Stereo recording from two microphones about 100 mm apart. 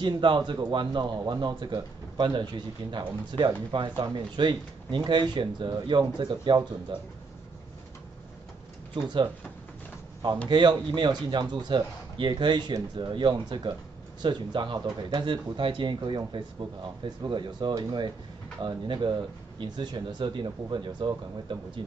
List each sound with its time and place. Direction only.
0.0 s a man's voice: 50° right (ahead or behind)
10.5 s a man's voice: 50° right (ahead or behind)